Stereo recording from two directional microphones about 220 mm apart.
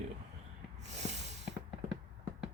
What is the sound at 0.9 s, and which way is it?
Snort, 30° right (ahead or behind).